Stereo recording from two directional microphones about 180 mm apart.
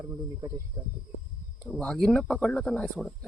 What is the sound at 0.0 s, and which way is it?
Speech, 20° right (ahead or behind).